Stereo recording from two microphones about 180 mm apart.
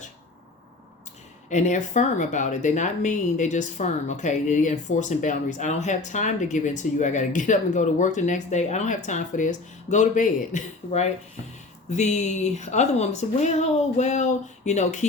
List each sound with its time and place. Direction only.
1.5 s speech: 40° left (ahead or behind)